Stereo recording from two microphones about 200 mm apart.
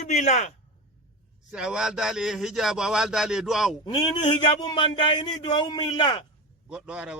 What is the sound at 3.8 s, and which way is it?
A man's voice, 20° left (ahead or behind).